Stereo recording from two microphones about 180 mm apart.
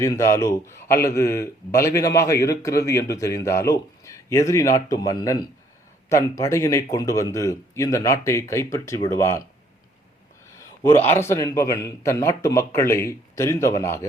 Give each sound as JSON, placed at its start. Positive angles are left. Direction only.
{"t": 0.0, "sound": "a man's voice", "side_deg": 15}
{"t": 10.6, "sound": "a man's voice", "side_deg": 15}